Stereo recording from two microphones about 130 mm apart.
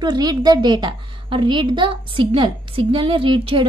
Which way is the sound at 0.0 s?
30° right (ahead or behind).